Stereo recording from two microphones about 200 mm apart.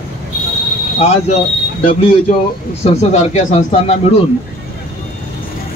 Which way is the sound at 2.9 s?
35° left (ahead or behind).